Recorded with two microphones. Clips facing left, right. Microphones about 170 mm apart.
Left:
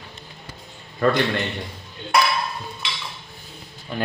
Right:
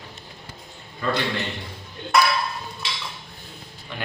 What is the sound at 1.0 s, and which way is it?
Speech, 55° left (ahead or behind).